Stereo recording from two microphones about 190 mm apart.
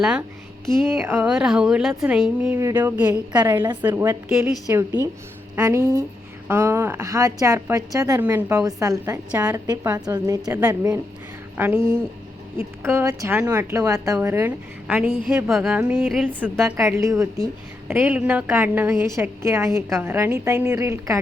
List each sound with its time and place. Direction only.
0.0 s a woman's voice: 5° right (ahead or behind)
2.6 s a woman's voice: 15° right (ahead or behind)